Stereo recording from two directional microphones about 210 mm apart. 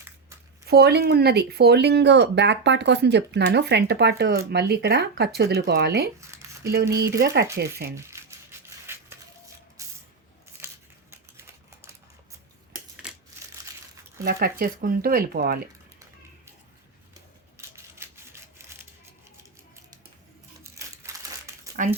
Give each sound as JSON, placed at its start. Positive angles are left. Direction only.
{"t": 0.6, "sound": "speech", "side_deg": -50}
{"t": 6.1, "sound": "speech", "side_deg": -15}
{"t": 6.9, "sound": "speech", "side_deg": -50}
{"t": 7.9, "sound": "a sound", "side_deg": -15}
{"t": 9.8, "sound": "spray", "side_deg": -15}
{"t": 10.6, "sound": "a sound", "side_deg": -15}
{"t": 11.1, "sound": "typewriter", "side_deg": -10}
{"t": 13.0, "sound": "crumpling", "side_deg": -5}
{"t": 14.3, "sound": "speech", "side_deg": -45}
{"t": 17.7, "sound": "a sound", "side_deg": -10}
{"t": 20.7, "sound": "crumpling", "side_deg": -15}